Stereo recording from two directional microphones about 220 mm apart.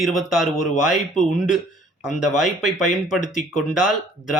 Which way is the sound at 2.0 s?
Centre (ahead or behind).